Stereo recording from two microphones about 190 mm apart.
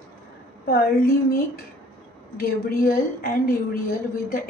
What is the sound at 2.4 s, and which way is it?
A woman's voice, 50° left (ahead or behind).